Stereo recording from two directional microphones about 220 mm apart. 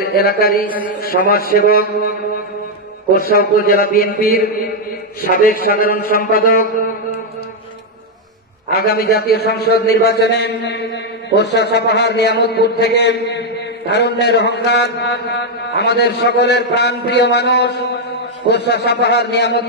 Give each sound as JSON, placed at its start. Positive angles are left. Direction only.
{"t": 0.1, "sound": "mantra", "side_deg": 45}
{"t": 3.2, "sound": "a man's voice", "side_deg": 45}
{"t": 8.8, "sound": "mantra", "side_deg": 45}